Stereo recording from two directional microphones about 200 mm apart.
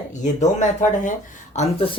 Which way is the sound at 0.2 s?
35° left (ahead or behind).